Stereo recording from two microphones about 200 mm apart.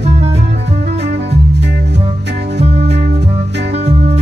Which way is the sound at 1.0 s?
60° right (ahead or behind).